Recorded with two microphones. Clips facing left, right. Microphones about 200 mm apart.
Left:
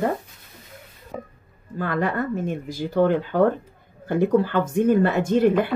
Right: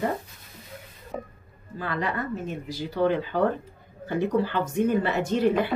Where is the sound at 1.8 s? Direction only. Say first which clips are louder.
Left 5 dB; 50° left (ahead or behind).